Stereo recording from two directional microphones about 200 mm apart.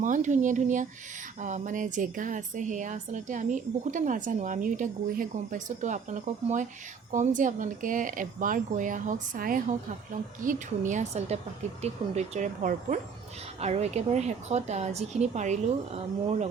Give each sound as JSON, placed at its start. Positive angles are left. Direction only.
{"t": 0.0, "sound": "speech", "side_deg": -40}